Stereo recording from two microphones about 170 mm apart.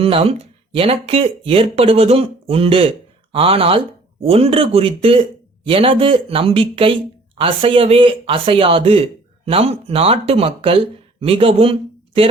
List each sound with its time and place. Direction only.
0.0 s speech: 35° right (ahead or behind)